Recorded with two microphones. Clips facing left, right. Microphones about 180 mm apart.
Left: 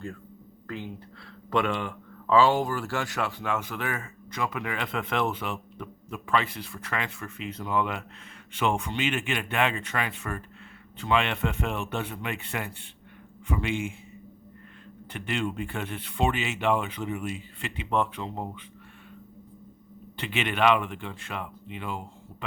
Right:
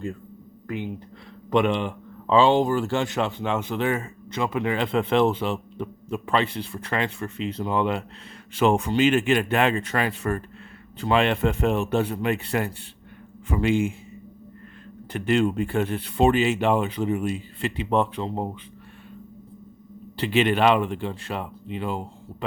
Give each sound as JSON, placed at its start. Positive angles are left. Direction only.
{"t": 0.7, "sound": "speech", "side_deg": -20}
{"t": 15.1, "sound": "speech", "side_deg": -40}
{"t": 20.1, "sound": "speech", "side_deg": -35}